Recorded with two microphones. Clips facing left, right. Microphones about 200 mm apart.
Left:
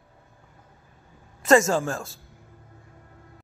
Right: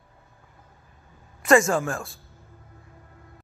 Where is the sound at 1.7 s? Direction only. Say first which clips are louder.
Even; 25° left (ahead or behind).